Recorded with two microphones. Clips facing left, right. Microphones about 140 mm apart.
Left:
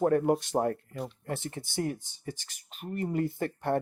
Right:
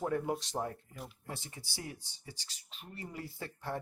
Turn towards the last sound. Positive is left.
turn(degrees=60)  # may be behind; listen again after turning